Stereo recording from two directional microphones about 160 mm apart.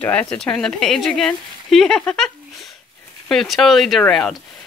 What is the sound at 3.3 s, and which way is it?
Speech, centre (ahead or behind).